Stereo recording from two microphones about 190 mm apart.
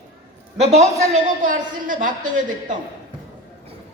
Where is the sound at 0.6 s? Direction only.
35° right (ahead or behind).